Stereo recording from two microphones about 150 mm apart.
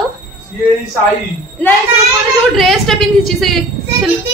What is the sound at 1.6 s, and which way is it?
A woman's voice, 10° left (ahead or behind).